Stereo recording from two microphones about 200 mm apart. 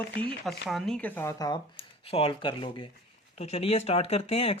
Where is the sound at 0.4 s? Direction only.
Centre (ahead or behind).